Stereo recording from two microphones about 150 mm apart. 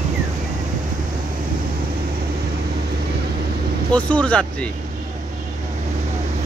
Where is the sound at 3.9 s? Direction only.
10° left (ahead or behind).